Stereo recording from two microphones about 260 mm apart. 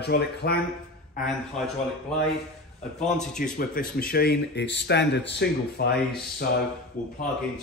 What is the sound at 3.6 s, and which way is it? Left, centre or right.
Speech, left.